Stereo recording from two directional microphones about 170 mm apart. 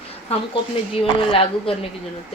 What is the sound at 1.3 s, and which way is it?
Speech, 35° left (ahead or behind).